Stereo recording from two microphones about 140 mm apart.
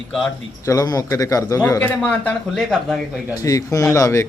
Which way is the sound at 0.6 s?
25° left (ahead or behind).